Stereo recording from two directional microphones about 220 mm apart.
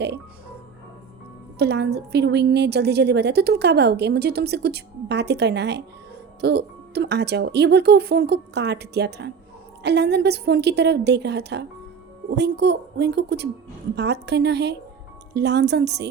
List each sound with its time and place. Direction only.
1.5 s a woman's voice: 50° right (ahead or behind)